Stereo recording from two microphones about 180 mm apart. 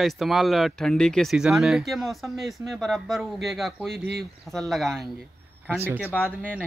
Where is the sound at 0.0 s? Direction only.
Centre (ahead or behind).